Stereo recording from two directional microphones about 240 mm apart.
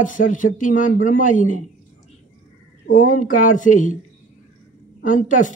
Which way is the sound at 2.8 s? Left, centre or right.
Left.